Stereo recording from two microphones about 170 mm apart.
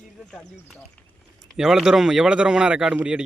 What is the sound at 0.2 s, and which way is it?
A man's voice, 5° left (ahead or behind).